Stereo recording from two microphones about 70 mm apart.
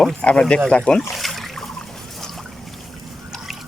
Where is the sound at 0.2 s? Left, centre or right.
Centre.